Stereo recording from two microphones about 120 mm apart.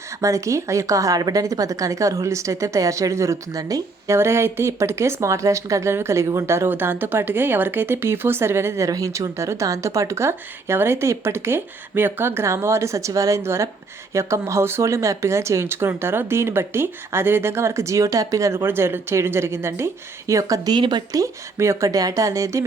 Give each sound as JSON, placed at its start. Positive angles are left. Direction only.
{"t": 0.2, "sound": "speech", "side_deg": -25}